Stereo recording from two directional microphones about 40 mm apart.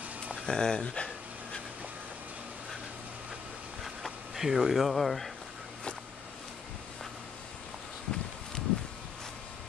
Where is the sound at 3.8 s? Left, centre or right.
Centre.